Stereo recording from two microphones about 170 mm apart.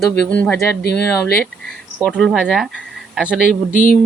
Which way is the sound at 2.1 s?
5° right (ahead or behind).